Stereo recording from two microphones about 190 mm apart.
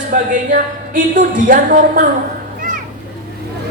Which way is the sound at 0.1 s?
45° right (ahead or behind).